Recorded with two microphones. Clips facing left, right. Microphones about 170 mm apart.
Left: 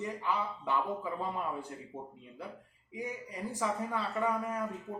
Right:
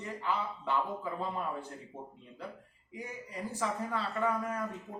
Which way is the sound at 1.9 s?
Centre (ahead or behind).